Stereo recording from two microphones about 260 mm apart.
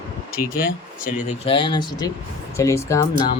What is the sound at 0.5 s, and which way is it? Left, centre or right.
Speech, left.